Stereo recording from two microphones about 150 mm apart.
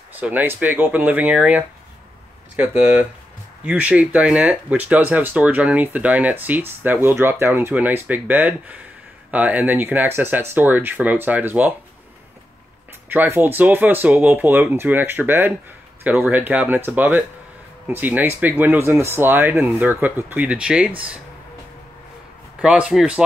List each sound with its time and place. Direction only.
0.1 s speech: 10° right (ahead or behind)
13.1 s speech: 15° right (ahead or behind)
22.6 s speech: 5° right (ahead or behind)